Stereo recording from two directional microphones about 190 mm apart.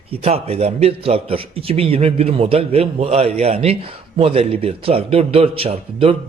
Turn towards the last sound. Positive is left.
turn(degrees=-30)  # may be behind; listen again after turning